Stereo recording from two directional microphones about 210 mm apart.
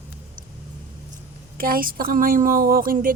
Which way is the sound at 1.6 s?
45° right (ahead or behind).